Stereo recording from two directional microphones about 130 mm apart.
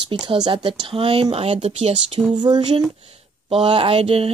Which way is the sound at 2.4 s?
35° right (ahead or behind).